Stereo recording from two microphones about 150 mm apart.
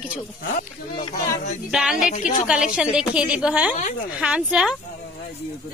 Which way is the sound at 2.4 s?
5° right (ahead or behind).